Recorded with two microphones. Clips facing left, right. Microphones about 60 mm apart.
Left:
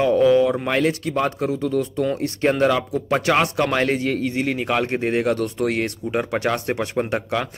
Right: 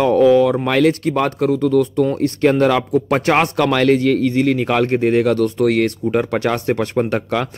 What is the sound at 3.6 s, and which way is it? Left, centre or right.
Speech, left.